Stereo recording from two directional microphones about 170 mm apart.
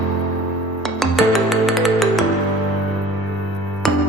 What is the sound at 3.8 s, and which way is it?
Music, centre (ahead or behind).